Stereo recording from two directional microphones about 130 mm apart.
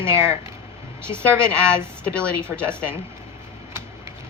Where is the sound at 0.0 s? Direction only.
20° right (ahead or behind).